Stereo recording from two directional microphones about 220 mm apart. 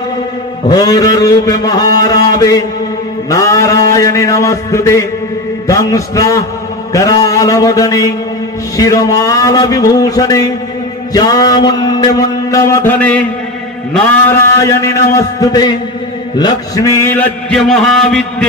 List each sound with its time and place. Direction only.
0.7 s mantra: 15° left (ahead or behind)
2.2 s a man's voice: 15° left (ahead or behind)
3.3 s mantra: 15° left (ahead or behind)
14.6 s mantra: 15° left (ahead or behind)
16.3 s a sound: 15° left (ahead or behind); by 18.2 s centre (ahead or behind)